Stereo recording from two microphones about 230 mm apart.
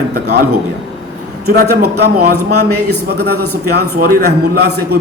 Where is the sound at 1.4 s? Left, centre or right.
Right.